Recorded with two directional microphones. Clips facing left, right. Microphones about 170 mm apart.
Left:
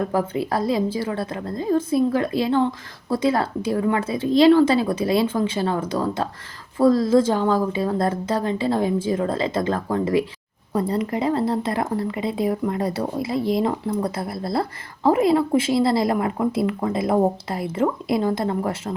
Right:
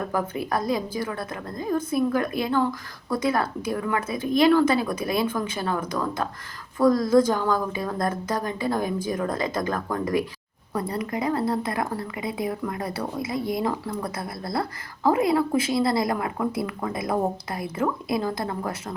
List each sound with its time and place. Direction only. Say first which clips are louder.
0.0 s speech: left 5 dB; 30° left (ahead or behind)